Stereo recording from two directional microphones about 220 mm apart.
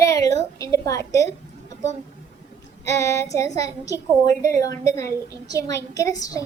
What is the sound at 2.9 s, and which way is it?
A woman's voice, 15° left (ahead or behind).